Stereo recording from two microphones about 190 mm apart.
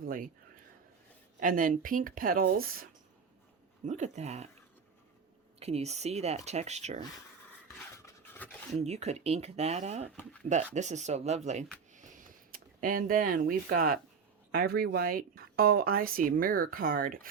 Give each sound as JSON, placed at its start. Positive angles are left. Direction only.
{"t": 0.0, "sound": "a sound", "side_deg": -45}
{"t": 1.4, "sound": "speech", "side_deg": -45}
{"t": 3.8, "sound": "speech", "side_deg": -40}
{"t": 5.5, "sound": "speech", "side_deg": -35}
{"t": 8.0, "sound": "pant", "side_deg": 10}
{"t": 8.8, "sound": "speech", "side_deg": -35}